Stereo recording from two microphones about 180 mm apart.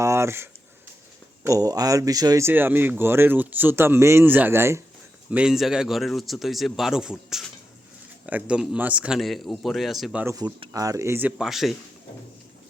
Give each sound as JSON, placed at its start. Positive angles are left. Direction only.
{"t": 0.0, "sound": "speech", "side_deg": -15}
{"t": 1.5, "sound": "speech", "side_deg": -20}
{"t": 10.3, "sound": "speech", "side_deg": -20}